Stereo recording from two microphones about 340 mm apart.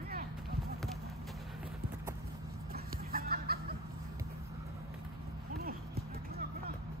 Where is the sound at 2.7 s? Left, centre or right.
Right.